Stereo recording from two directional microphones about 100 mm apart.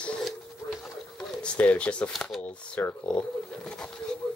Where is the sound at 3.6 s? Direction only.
10° left (ahead or behind).